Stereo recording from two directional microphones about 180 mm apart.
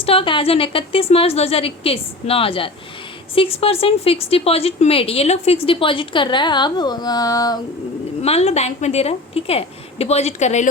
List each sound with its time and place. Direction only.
0.0 s a woman's voice: 30° left (ahead or behind)
8.2 s a woman's voice: 35° left (ahead or behind)